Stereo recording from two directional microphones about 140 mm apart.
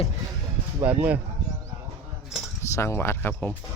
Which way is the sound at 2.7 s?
20° left (ahead or behind).